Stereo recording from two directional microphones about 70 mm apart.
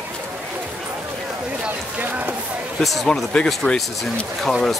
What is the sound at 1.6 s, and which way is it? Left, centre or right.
Run, right.